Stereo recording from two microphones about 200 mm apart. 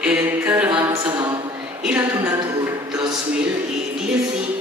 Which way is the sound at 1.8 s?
10° right (ahead or behind).